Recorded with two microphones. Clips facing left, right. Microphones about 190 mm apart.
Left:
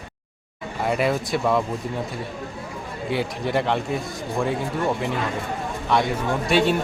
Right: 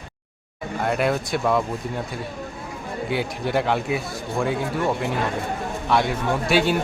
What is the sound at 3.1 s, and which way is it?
Speech, centre (ahead or behind).